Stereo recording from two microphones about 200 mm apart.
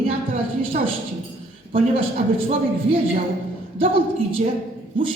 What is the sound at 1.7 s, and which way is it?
A man's voice, 30° right (ahead or behind).